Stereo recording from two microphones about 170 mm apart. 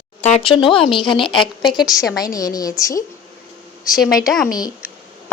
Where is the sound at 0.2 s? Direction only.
40° left (ahead or behind); by 3.0 s 20° left (ahead or behind).